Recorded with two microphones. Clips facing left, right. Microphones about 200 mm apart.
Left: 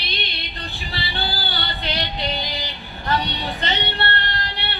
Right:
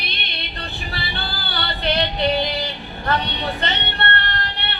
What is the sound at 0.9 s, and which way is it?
Music, 55° right (ahead or behind).